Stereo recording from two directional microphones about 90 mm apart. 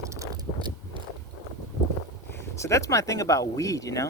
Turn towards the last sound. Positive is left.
turn(degrees=40)  # may be behind; listen again after turning